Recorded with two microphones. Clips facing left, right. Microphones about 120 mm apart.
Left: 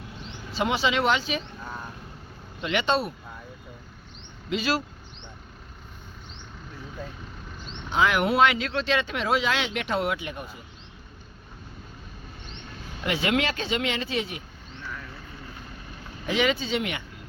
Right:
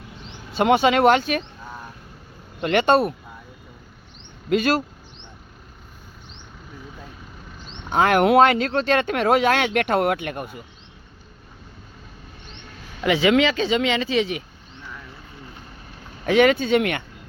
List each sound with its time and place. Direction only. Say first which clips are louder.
0.5 s speech: right 8 dB; 55° right (ahead or behind)
2.6 s speech: right 7 dB; 50° right (ahead or behind)
4.4 s speech: right 7 dB; 50° right (ahead or behind)
7.9 s speech: right 6 dB; 50° right (ahead or behind)
8.4 s speech: right 6 dB; 45° right (ahead or behind)
13.1 s speech: right 8 dB; 90° right
16.2 s speech: right 8 dB; 55° right (ahead or behind)